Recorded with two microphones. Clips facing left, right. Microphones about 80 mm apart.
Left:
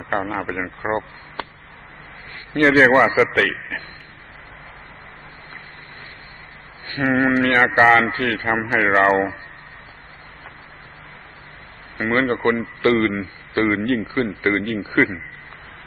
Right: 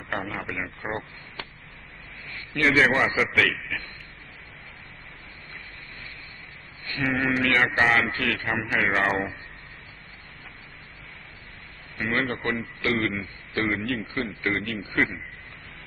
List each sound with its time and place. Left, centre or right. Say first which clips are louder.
0.1 s a man's voice: left 8 dB; left
6.9 s a man's voice: left 7 dB; left
12.0 s a man's voice: left 8 dB; left